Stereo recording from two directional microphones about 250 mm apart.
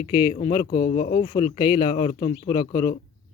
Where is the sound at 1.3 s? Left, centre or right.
Centre.